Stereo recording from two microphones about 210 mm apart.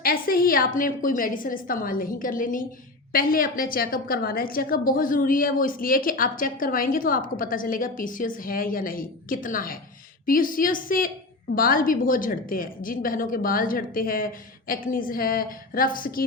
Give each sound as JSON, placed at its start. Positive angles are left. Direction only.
{"t": 0.0, "sound": "a woman's voice", "side_deg": 45}